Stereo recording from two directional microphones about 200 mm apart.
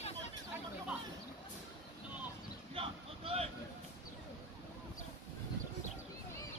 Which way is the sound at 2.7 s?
30° right (ahead or behind).